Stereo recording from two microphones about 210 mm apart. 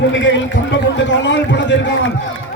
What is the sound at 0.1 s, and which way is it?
A man's voice, 60° left (ahead or behind).